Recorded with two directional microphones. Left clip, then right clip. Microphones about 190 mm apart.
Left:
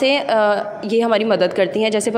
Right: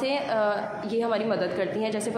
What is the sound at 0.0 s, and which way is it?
A woman's voice, 40° left (ahead or behind).